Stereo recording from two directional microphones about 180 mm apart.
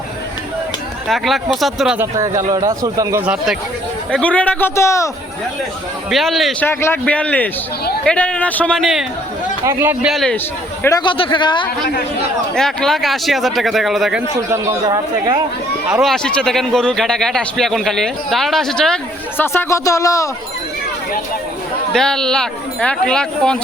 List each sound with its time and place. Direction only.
1.0 s speech: centre (ahead or behind)
2.0 s speech: 15° right (ahead or behind)
4.1 s a man's voice: 5° left (ahead or behind)
6.1 s speech: centre (ahead or behind)
6.7 s a man's voice: 15° left (ahead or behind)
9.6 s speech: 10° right (ahead or behind)
10.8 s speech: 25° left (ahead or behind)
12.5 s speech: 5° left (ahead or behind)
14.5 s speech: 15° right (ahead or behind)
15.9 s speech: centre (ahead or behind)
19.4 s a man's voice: 15° left (ahead or behind)
21.9 s speech: 5° left (ahead or behind)